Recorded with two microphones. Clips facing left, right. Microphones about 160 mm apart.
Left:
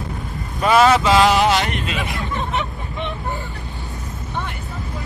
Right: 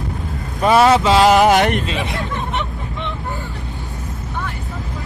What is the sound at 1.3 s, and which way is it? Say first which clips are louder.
Speech: right 5 dB; 50° right (ahead or behind).